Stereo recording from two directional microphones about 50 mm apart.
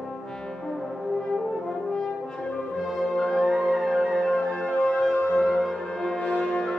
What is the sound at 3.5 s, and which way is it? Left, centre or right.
Music, centre.